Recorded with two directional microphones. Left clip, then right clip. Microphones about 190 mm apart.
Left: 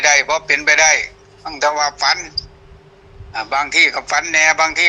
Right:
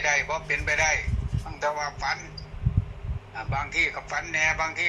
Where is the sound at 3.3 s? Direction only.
60° left (ahead or behind).